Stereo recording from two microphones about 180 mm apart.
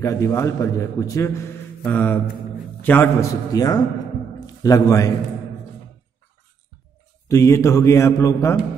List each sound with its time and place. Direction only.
0.0 s a man's voice: 15° left (ahead or behind)
7.2 s a man's voice: 15° left (ahead or behind)